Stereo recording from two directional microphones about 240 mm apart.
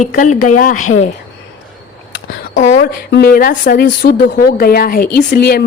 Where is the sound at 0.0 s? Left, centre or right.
Left.